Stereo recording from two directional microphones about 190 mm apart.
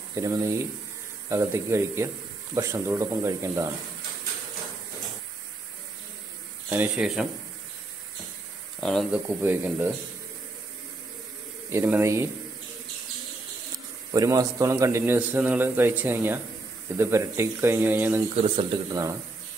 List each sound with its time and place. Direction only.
0.1 s a man's voice: 15° right (ahead or behind)
6.7 s speech: 5° right (ahead or behind)
8.8 s speech: centre (ahead or behind)
9.4 s a man's voice: 10° right (ahead or behind)
11.7 s a man's voice: 10° right (ahead or behind)
14.1 s a man's voice: 20° right (ahead or behind)
18.4 s speech: 30° right (ahead or behind)
18.9 s a man's voice: 20° right (ahead or behind)